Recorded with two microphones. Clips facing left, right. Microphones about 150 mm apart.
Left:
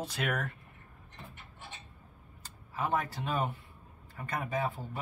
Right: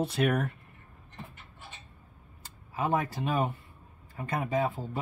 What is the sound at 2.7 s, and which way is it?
Speech, 15° right (ahead or behind).